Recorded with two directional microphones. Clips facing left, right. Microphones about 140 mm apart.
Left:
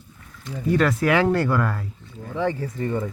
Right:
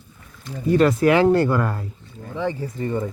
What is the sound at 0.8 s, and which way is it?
Speech, 20° right (ahead or behind).